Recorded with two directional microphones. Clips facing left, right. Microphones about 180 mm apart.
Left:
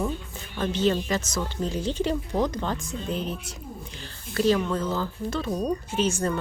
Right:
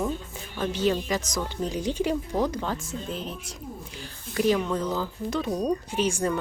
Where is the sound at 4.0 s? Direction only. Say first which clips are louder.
Left 1 dB; 15° right (ahead or behind).